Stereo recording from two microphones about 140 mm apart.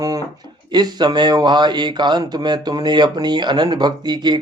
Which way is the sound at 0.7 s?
30° right (ahead or behind).